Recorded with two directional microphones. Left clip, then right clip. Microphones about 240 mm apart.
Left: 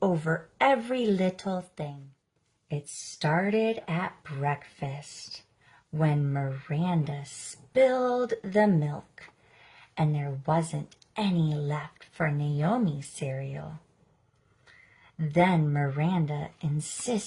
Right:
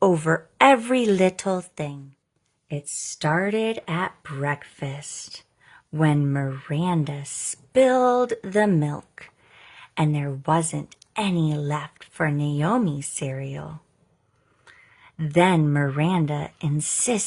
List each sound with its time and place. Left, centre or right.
0.0 s speech: right
2.6 s speech: right
15.3 s speech: right